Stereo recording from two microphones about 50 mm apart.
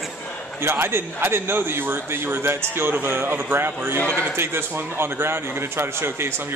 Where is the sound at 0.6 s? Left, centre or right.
Right.